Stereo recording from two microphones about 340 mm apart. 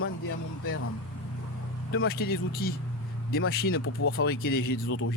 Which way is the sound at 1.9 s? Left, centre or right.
Left.